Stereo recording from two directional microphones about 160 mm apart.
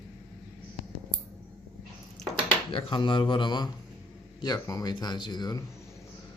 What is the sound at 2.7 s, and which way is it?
Speech, 30° left (ahead or behind).